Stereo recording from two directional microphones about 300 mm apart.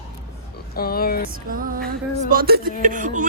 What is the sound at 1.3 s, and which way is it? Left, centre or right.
Speech, right.